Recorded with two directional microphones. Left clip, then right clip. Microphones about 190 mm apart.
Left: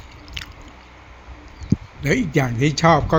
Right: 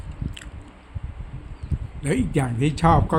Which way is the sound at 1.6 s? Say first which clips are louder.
Left 6 dB; 10° left (ahead or behind).